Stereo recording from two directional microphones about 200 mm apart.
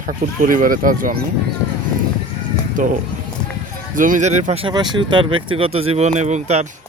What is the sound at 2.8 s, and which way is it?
Speech, 40° right (ahead or behind).